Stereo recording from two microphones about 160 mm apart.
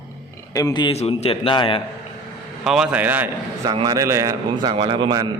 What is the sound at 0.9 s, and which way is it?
Speech, 40° left (ahead or behind).